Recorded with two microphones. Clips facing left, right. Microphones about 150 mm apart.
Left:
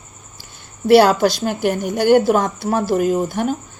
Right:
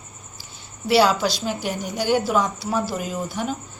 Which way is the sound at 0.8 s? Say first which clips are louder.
Left 7 dB; 50° left (ahead or behind).